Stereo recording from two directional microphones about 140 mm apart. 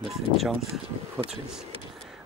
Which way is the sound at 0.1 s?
Centre (ahead or behind).